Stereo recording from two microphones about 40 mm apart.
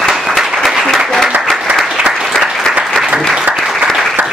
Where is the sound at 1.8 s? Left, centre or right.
Centre.